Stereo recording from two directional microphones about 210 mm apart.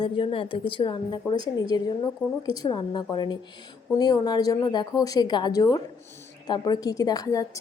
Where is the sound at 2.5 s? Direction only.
20° left (ahead or behind).